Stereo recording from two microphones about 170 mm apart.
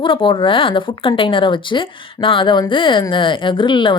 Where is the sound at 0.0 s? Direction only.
30° left (ahead or behind).